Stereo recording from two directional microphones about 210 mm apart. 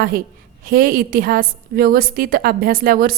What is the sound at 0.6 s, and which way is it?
A woman's voice, 40° right (ahead or behind).